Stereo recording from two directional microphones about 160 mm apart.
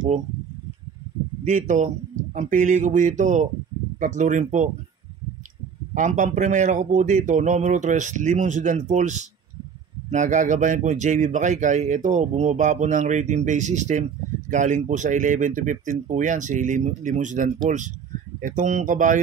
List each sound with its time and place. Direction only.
1.4 s speech: 50° right (ahead or behind)
5.9 s speech: 50° right (ahead or behind)